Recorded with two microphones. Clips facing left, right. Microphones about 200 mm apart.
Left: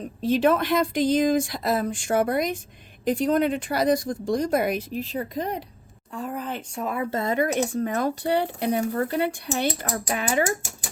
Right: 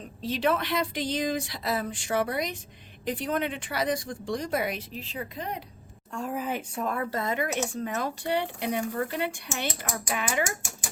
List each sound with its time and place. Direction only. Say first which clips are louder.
0.2 s speech: left 6 dB; 50° left (ahead or behind)
6.1 s a woman's voice: even; centre (ahead or behind)
6.8 s a woman's voice: left 3 dB; 10° left (ahead or behind)
7.1 s speech: left 5 dB; 30° left (ahead or behind)